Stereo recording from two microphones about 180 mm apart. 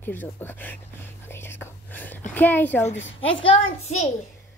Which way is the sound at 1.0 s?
15° left (ahead or behind).